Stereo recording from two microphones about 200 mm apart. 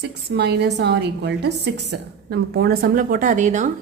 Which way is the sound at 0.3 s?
55° right (ahead or behind).